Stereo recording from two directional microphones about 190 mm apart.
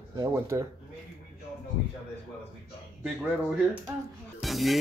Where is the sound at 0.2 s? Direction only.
15° right (ahead or behind).